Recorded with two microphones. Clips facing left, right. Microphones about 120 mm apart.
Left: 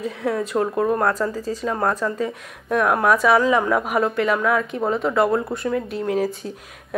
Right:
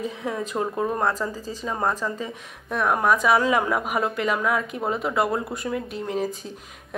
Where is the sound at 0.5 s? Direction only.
15° left (ahead or behind).